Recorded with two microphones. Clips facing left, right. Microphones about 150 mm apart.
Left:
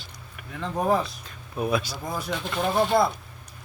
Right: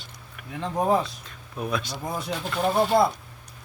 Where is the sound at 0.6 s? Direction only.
25° right (ahead or behind).